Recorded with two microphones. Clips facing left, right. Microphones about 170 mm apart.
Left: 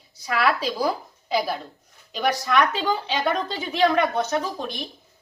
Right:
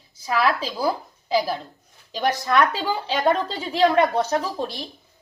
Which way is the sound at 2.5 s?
30° right (ahead or behind).